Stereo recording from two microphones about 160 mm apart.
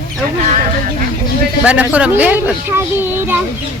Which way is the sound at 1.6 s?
10° right (ahead or behind).